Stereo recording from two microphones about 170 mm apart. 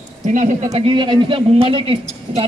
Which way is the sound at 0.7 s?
30° right (ahead or behind).